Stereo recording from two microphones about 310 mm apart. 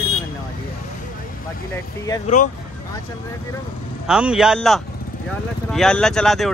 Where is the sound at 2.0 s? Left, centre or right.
Centre.